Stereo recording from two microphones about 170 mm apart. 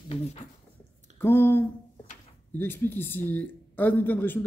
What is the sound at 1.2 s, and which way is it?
A man's voice, 15° left (ahead or behind).